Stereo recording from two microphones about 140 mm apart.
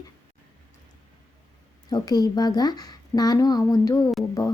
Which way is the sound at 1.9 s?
25° left (ahead or behind).